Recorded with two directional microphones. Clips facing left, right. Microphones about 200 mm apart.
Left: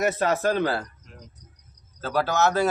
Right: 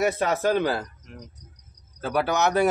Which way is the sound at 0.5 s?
15° right (ahead or behind).